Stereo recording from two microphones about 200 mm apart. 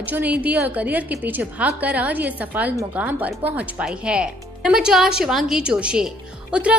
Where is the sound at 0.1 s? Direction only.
5° right (ahead or behind).